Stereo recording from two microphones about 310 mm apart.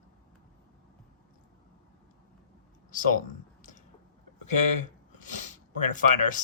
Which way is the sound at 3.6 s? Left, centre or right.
Left.